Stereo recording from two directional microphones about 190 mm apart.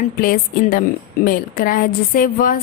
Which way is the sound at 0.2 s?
50° left (ahead or behind).